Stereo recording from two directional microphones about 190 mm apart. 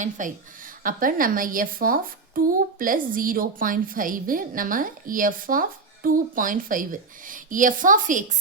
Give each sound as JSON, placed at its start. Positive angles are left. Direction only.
{"t": 0.0, "sound": "a woman's voice", "side_deg": -45}